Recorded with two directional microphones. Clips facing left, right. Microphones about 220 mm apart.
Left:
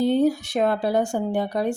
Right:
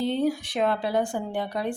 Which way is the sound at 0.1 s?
40° left (ahead or behind).